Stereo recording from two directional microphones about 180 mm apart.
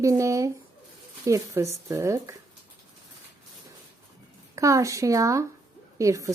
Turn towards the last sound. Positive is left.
turn(degrees=-15)  # may be behind; listen again after turning